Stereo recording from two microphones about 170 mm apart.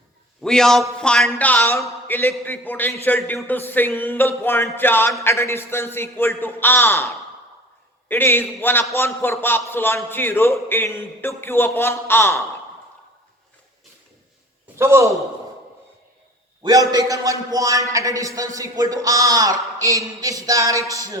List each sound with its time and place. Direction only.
0.4 s speech: 5° left (ahead or behind)
14.8 s a man's voice: 15° right (ahead or behind)
16.6 s a man's voice: 20° right (ahead or behind)